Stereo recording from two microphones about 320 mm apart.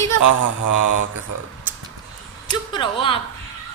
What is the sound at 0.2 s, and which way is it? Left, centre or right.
Mantra, right.